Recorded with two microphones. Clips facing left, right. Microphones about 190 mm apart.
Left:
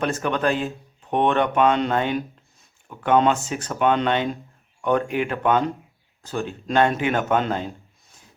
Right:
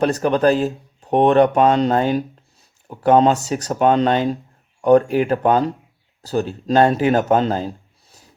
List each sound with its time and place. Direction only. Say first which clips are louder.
0.0 s speech: right 7 dB; 35° right (ahead or behind)